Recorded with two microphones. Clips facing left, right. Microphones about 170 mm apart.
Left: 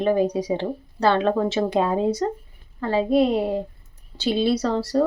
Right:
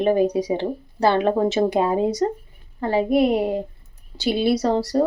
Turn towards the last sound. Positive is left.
turn(degrees=-15)  # may be behind; listen again after turning